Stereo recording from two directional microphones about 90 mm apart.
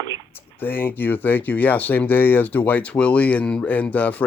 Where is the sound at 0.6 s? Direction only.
20° left (ahead or behind).